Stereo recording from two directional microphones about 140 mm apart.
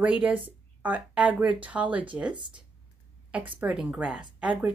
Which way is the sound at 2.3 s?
35° right (ahead or behind).